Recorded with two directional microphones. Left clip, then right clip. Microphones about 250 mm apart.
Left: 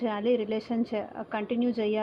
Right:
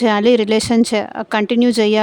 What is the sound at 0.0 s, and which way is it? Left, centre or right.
Speech, right.